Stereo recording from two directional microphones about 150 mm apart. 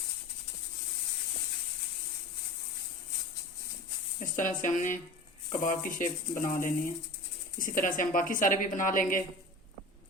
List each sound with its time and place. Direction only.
4.2 s a woman's voice: 60° left (ahead or behind)